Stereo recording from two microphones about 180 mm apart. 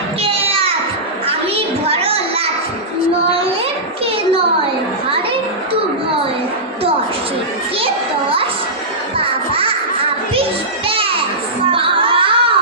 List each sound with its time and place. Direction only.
0.2 s a sound: 30° right (ahead or behind)
1.3 s children playing: 30° right (ahead or behind)
9.1 s music: 30° right (ahead or behind)
10.8 s music: 30° right (ahead or behind)